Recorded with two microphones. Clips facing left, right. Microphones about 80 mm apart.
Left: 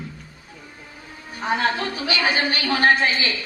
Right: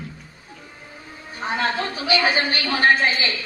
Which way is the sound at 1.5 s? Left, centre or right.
Left.